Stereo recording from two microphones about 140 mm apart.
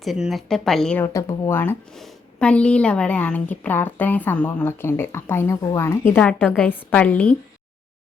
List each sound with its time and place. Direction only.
0.0 s a woman's voice: centre (ahead or behind)
0.9 s a woman's voice: 20° left (ahead or behind)
1.9 s a woman's voice: 5° left (ahead or behind)